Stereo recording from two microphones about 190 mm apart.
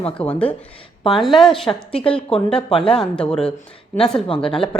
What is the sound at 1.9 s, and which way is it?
Speech, 30° left (ahead or behind).